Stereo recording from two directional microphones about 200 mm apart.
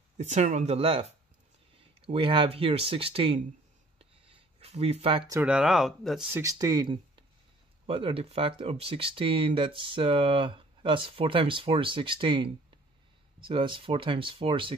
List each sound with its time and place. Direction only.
0.2 s speech: 35° right (ahead or behind)
4.3 s a sound: 30° right (ahead or behind)
5.3 s speech: 5° right (ahead or behind)
6.3 s speech: 15° right (ahead or behind)